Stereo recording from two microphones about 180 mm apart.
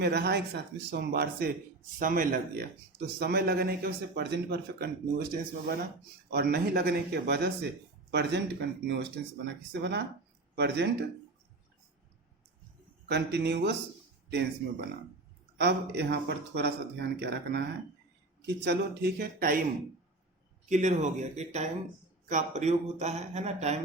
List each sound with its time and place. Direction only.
0.0 s speech: 65° right (ahead or behind)
2.0 s a man's voice: 50° right (ahead or behind); by 8.4 s 70° right (ahead or behind)
9.4 s a man's voice: 70° right (ahead or behind)
13.1 s a man's voice: 70° right (ahead or behind)
20.7 s a man's voice: 40° right (ahead or behind)